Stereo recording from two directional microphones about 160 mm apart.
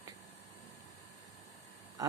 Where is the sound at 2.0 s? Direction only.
25° right (ahead or behind).